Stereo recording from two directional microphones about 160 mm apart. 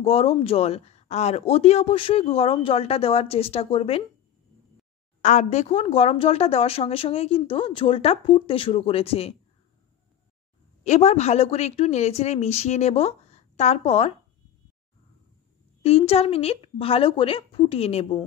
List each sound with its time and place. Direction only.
0.0 s speech: 35° left (ahead or behind)
5.2 s speech: 45° left (ahead or behind)
10.8 s a woman's voice: 45° left (ahead or behind)
15.8 s speech: 40° left (ahead or behind)